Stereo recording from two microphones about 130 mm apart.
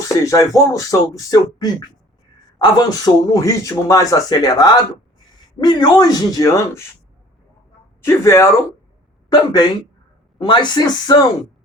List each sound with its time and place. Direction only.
0.2 s speech: 25° left (ahead or behind)
8.0 s speech: 20° left (ahead or behind)
9.3 s speech: 35° left (ahead or behind)